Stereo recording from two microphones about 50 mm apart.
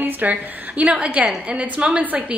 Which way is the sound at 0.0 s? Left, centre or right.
Right.